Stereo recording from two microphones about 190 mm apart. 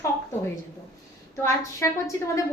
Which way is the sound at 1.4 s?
15° left (ahead or behind).